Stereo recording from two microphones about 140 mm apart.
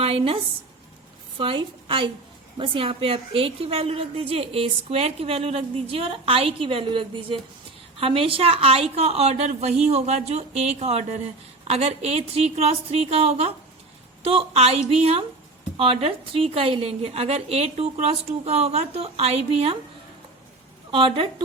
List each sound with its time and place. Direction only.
0.0 s speech: 45° right (ahead or behind)
1.4 s a woman's voice: 40° right (ahead or behind)
20.9 s a woman's voice: 40° right (ahead or behind)